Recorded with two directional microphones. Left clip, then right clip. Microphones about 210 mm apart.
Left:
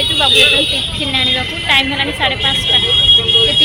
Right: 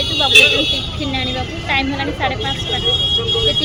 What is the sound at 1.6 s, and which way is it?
Speech, centre (ahead or behind).